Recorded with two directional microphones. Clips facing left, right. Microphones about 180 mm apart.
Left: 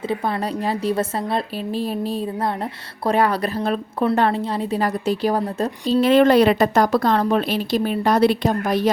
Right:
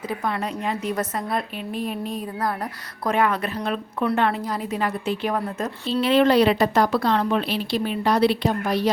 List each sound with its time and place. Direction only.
0.1 s a woman's voice: 35° left (ahead or behind)